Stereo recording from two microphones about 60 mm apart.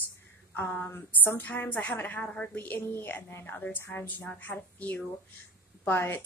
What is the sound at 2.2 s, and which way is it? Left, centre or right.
Speech, centre.